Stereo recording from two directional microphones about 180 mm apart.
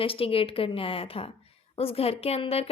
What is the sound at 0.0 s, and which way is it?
A woman's voice, 30° left (ahead or behind).